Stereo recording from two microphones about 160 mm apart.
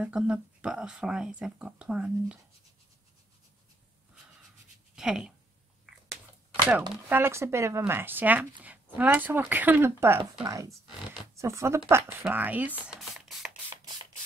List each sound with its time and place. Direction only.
0.0 s speech: 5° right (ahead or behind)
4.9 s speech: 5° right (ahead or behind)
7.1 s speech: 15° right (ahead or behind)
12.2 s scratch: 10° right (ahead or behind)